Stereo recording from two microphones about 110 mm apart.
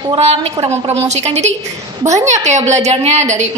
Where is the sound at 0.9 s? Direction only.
85° right.